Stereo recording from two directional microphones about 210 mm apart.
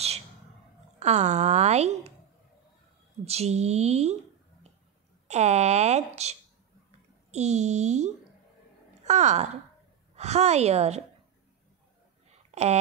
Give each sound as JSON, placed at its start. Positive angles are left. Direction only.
{"t": 0.9, "sound": "speech", "side_deg": -30}
{"t": 3.3, "sound": "speech", "side_deg": -30}
{"t": 5.3, "sound": "speech", "side_deg": -30}
{"t": 12.4, "sound": "a sound", "side_deg": -30}